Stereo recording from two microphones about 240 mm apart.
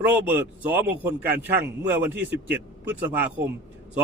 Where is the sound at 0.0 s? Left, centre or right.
Centre.